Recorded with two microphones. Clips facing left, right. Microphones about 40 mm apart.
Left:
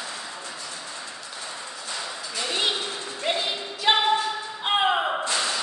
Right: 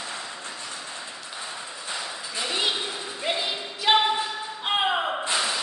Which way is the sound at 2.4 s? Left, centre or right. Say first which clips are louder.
Even; centre.